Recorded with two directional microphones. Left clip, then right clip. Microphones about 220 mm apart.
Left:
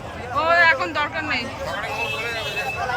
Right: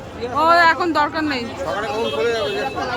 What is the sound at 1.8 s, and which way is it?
Speech, 40° right (ahead or behind).